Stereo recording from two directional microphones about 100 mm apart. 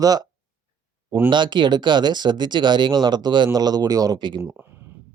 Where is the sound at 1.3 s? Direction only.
50° right (ahead or behind).